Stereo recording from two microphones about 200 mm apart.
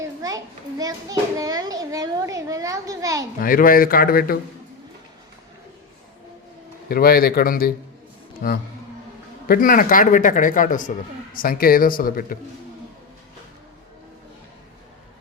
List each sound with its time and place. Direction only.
0.0 s a child's voice: 15° right (ahead or behind)
3.3 s speech: 45° left (ahead or behind)
6.8 s speech: 50° left (ahead or behind)